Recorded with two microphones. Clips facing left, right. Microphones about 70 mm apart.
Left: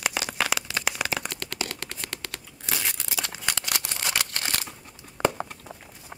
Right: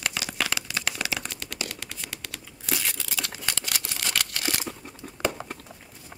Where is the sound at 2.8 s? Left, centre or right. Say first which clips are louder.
Left 1 dB; centre.